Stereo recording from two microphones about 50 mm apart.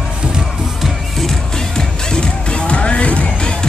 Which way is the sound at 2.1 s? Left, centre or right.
Left.